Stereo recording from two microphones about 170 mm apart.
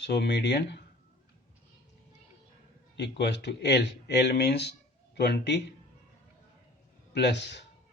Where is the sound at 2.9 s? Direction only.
90° left.